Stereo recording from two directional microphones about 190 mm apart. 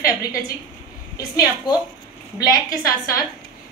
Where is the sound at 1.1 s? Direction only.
20° left (ahead or behind).